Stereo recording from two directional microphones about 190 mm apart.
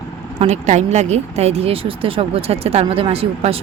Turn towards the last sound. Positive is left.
turn(degrees=-30)  # may be behind; listen again after turning